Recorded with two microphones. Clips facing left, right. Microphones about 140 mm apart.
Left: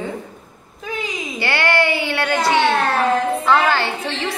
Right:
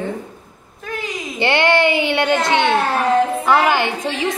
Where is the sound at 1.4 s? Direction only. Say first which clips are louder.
Right 4 dB; 20° right (ahead or behind).